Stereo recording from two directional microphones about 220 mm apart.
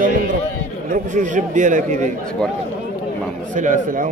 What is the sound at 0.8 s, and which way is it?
A man's voice, 35° right (ahead or behind).